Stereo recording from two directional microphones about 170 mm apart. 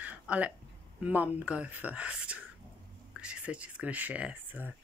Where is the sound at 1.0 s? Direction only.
10° right (ahead or behind).